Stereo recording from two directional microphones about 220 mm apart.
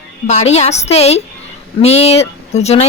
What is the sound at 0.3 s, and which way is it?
A woman's voice, 30° left (ahead or behind).